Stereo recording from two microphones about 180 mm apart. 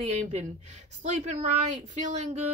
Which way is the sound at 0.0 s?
40° right (ahead or behind).